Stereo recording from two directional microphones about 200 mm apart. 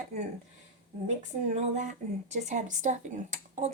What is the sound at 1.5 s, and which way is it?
Speech, 35° right (ahead or behind).